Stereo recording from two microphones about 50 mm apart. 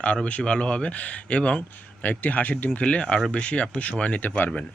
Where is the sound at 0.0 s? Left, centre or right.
Left.